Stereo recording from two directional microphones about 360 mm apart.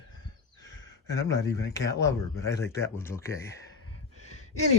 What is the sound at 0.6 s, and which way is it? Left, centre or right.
Speech, centre.